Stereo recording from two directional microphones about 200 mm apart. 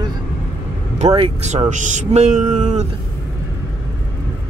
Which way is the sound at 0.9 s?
30° right (ahead or behind).